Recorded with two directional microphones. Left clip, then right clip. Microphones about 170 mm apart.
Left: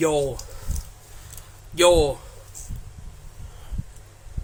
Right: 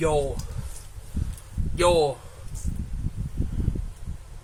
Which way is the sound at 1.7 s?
60° left (ahead or behind).